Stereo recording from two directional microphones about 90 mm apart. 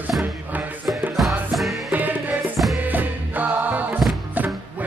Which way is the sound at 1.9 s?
20° right (ahead or behind).